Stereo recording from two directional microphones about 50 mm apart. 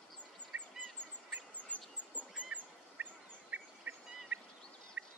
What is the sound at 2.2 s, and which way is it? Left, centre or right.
Bird, left.